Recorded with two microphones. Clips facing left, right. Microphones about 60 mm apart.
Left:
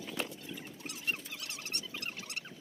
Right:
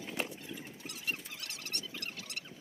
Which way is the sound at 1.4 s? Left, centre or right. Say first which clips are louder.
Left 1 dB; left.